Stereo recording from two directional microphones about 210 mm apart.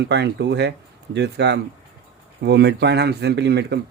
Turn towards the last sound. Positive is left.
turn(degrees=-55)  # may be behind; listen again after turning